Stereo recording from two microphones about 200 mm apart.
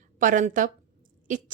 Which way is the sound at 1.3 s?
40° right (ahead or behind).